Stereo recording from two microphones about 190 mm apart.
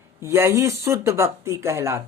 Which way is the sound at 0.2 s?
15° right (ahead or behind).